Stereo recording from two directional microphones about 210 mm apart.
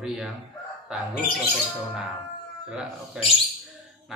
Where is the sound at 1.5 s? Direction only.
5° right (ahead or behind).